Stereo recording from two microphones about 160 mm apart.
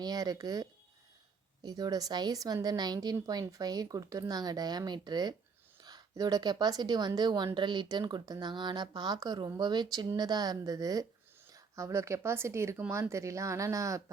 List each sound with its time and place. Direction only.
0.0 s a woman's voice: 25° right (ahead or behind)